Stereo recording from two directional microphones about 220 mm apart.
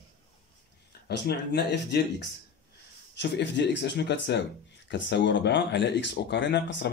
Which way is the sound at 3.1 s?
50° left (ahead or behind).